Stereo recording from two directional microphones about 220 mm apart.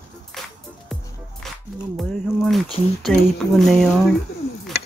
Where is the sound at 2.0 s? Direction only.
Centre (ahead or behind).